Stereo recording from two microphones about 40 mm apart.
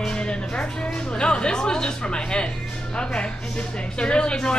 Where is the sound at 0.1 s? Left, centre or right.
Left.